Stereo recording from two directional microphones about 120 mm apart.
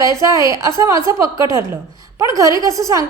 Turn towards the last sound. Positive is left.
turn(degrees=-30)  # may be behind; listen again after turning